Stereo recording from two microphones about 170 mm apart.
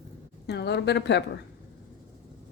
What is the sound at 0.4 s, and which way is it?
Speech, 75° left (ahead or behind).